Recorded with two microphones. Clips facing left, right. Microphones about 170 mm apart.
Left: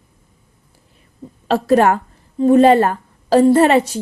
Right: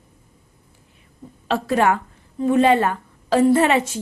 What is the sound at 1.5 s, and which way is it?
A woman's voice, 40° left (ahead or behind).